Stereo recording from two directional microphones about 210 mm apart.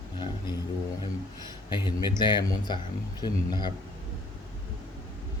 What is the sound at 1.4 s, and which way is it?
Speech, 20° left (ahead or behind).